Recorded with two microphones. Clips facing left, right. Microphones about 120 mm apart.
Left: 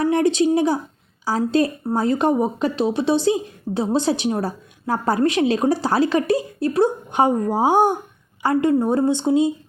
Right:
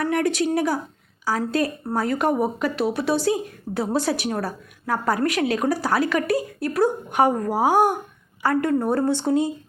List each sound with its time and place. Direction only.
0.0 s speech: 25° left (ahead or behind)